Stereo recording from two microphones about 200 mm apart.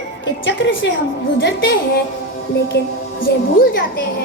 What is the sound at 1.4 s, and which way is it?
Speech, 55° left (ahead or behind).